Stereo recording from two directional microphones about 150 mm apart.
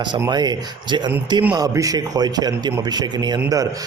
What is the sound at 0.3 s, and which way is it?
A man's voice, 30° right (ahead or behind).